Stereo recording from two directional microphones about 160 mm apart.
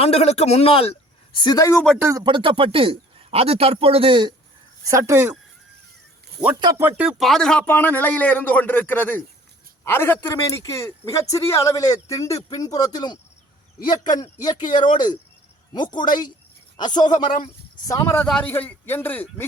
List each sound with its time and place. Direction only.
0.0 s speech: 40° left (ahead or behind); by 1.8 s 20° left (ahead or behind)
2.0 s speech: 15° right (ahead or behind)
2.2 s a man's voice: 30° right (ahead or behind)
4.9 s speech: 20° right (ahead or behind)
6.7 s a man's voice: 10° right (ahead or behind); by 19.5 s 10° left (ahead or behind)